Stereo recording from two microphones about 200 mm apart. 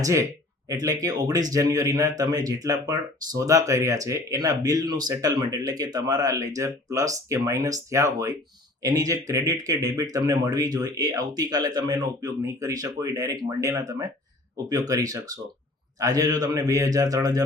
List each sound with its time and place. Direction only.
0.0 s speech: 15° right (ahead or behind)